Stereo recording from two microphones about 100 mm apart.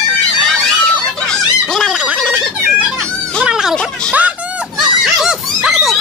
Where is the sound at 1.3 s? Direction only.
5° left (ahead or behind).